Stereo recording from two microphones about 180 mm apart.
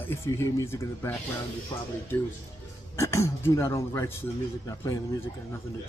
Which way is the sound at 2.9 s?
15° left (ahead or behind).